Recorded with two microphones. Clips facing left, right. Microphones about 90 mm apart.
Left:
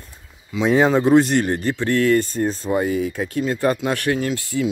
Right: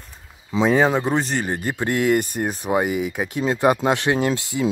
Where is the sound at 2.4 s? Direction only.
70° right (ahead or behind).